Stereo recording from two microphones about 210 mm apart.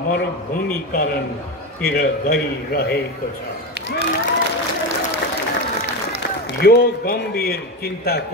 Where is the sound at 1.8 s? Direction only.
45° left (ahead or behind).